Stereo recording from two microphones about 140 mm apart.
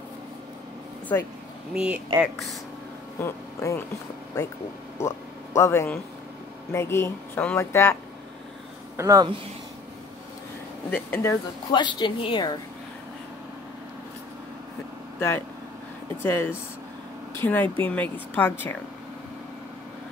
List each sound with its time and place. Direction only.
1.7 s speech: 5° right (ahead or behind)
3.2 s speech: 20° left (ahead or behind)
4.9 s a sound: 20° left (ahead or behind)
6.7 s speech: 20° left (ahead or behind)
8.9 s speech: 25° right (ahead or behind)
10.9 s speech: 15° left (ahead or behind)
11.7 s a woman's voice: 35° left (ahead or behind)
15.1 s speech: 15° left (ahead or behind)